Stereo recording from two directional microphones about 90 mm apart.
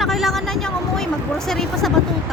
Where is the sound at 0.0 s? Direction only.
Centre (ahead or behind).